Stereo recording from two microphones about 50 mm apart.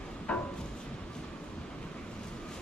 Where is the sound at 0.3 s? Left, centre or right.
Left.